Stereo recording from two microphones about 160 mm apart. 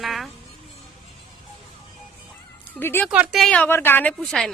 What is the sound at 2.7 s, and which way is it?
Speech, 10° left (ahead or behind).